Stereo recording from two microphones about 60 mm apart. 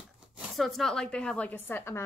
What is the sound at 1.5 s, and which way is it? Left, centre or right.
Speech, left.